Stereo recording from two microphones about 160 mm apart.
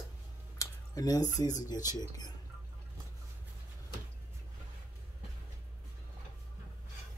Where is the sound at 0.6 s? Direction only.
20° left (ahead or behind).